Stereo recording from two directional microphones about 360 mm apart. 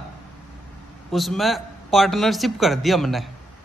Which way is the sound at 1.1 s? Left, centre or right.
Centre.